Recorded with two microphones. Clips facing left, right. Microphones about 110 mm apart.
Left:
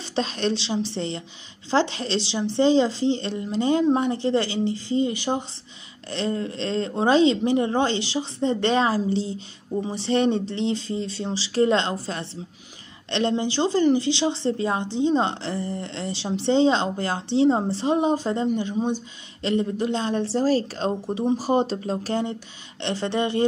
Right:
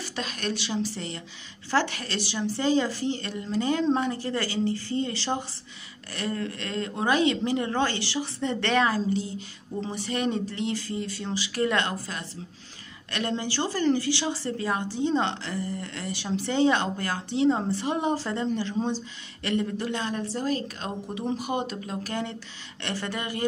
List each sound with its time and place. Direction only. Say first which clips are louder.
0.0 s a woman's voice: left 7 dB; 25° left (ahead or behind)